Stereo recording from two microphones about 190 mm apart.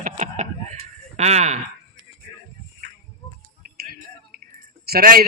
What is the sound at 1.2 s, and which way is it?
Speech, 35° right (ahead or behind).